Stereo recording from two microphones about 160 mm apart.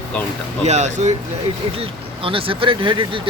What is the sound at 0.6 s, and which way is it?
Speech, 45° right (ahead or behind).